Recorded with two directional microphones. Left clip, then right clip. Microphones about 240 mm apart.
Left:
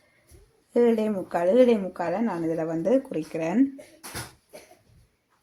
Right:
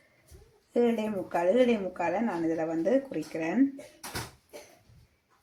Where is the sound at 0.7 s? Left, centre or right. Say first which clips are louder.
Left 5 dB; left.